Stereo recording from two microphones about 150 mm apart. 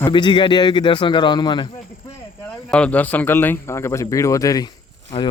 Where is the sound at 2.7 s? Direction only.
10° left (ahead or behind).